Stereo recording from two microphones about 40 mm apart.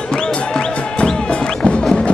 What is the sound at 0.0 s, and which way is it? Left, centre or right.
Music, left.